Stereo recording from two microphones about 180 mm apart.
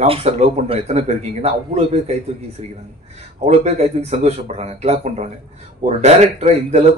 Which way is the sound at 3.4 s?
40° right (ahead or behind).